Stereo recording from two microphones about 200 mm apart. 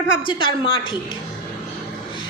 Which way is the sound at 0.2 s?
25° left (ahead or behind).